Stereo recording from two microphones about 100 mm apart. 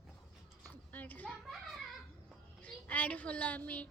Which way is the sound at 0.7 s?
15° left (ahead or behind).